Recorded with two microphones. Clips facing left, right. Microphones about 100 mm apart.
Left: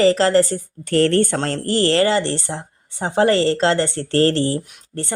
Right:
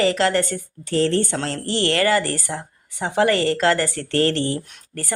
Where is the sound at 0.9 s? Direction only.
60° left (ahead or behind).